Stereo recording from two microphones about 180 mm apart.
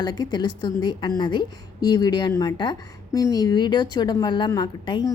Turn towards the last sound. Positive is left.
turn(degrees=25)  # may be behind; listen again after turning